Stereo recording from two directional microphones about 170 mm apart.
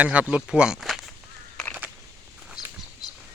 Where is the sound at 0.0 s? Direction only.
10° right (ahead or behind).